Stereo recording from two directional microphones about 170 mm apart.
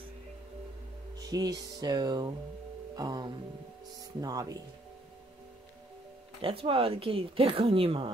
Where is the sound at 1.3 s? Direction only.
20° right (ahead or behind).